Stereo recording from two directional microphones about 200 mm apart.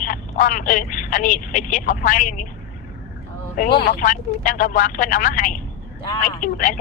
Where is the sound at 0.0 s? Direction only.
40° left (ahead or behind).